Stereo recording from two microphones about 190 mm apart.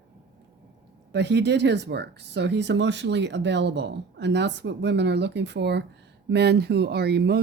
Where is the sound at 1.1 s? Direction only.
65° right (ahead or behind).